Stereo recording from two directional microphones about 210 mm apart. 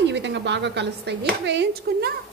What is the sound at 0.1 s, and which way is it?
A woman's voice, 55° right (ahead or behind).